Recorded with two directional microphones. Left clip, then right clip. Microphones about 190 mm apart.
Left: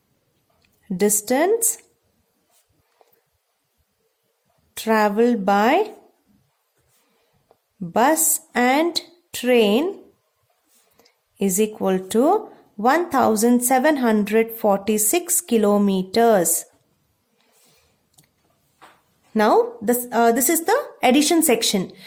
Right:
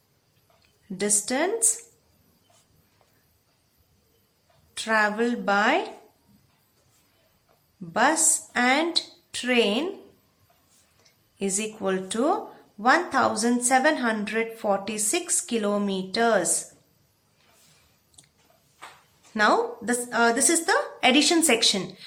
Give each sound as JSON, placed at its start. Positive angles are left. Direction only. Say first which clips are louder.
{"t": 0.9, "sound": "a woman's voice", "louder": "left 7 dB", "side_deg": 45}
{"t": 4.7, "sound": "a woman's voice", "louder": "left 4 dB", "side_deg": 45}
{"t": 7.9, "sound": "a woman's voice", "louder": "left 4 dB", "side_deg": 45}
{"t": 11.0, "sound": "a woman's voice", "louder": "left 6 dB", "side_deg": 45}
{"t": 19.3, "sound": "a woman's voice", "louder": "left 5 dB", "side_deg": 45}